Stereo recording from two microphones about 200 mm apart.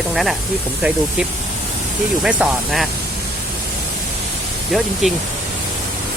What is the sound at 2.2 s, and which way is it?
Speech, 5° right (ahead or behind).